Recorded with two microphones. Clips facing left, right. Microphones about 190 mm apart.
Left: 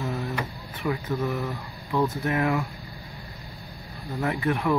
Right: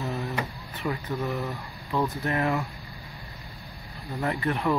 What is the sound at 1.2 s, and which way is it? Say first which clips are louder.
Speech: left 2 dB; 15° right (ahead or behind).